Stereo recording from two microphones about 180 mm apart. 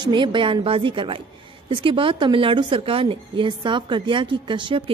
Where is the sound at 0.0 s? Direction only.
25° right (ahead or behind).